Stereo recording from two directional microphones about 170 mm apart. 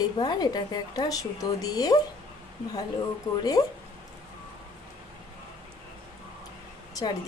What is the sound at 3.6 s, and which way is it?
Speech, 25° left (ahead or behind).